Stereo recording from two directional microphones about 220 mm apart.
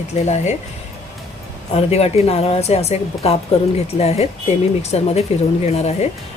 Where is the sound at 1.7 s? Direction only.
30° left (ahead or behind).